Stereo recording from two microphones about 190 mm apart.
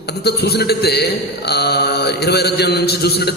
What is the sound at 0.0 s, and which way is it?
A man's voice, 60° left (ahead or behind).